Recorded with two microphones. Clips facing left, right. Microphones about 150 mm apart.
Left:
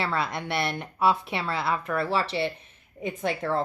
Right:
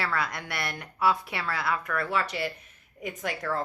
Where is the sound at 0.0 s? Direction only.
25° left (ahead or behind).